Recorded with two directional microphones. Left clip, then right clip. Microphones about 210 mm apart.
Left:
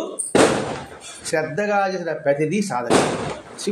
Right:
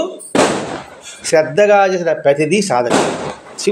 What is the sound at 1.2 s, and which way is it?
Speech, 35° right (ahead or behind).